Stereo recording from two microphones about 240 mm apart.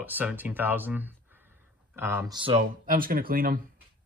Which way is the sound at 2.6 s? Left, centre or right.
Right.